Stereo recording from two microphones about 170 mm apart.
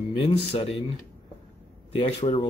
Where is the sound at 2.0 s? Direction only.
30° left (ahead or behind).